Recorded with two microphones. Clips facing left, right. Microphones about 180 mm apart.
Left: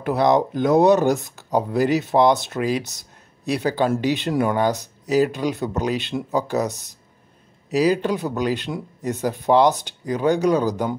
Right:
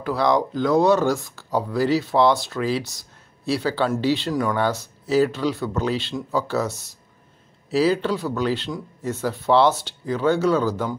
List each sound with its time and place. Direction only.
0.0 s speech: 20° left (ahead or behind)